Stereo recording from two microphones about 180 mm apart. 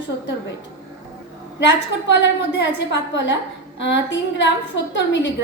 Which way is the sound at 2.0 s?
80° left.